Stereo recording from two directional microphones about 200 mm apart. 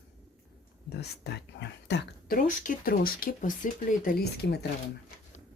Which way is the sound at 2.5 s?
45° left (ahead or behind).